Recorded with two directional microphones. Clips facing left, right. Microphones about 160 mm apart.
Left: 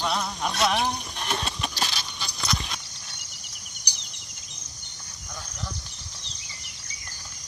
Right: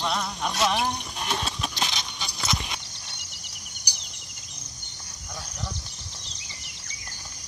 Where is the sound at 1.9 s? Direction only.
20° right (ahead or behind).